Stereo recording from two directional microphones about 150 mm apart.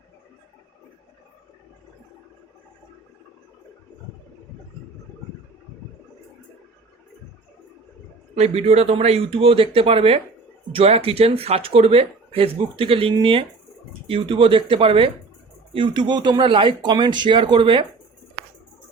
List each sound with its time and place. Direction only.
8.4 s speech: 45° right (ahead or behind)